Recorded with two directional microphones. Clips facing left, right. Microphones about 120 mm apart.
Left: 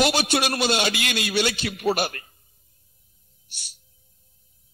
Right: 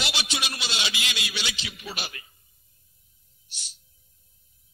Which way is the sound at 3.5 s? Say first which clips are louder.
Even; 55° left (ahead or behind).